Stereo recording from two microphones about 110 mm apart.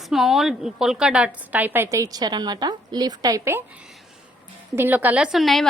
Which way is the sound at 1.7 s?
30° right (ahead or behind).